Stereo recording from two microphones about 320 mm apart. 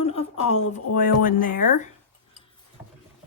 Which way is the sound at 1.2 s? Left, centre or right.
Left.